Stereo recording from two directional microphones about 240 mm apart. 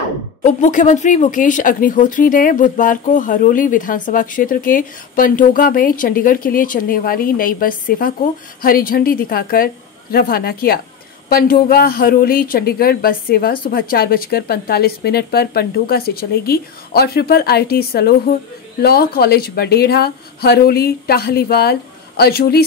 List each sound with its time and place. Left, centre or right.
0.4 s speech: left